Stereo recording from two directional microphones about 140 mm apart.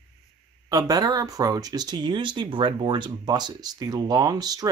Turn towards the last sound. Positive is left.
turn(degrees=-25)  # may be behind; listen again after turning